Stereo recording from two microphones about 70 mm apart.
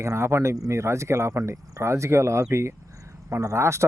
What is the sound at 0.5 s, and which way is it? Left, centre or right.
Speech, right.